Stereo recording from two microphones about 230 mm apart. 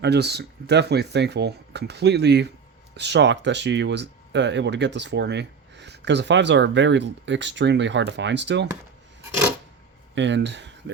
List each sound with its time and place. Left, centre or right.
0.0 s speech: right
10.2 s speech: right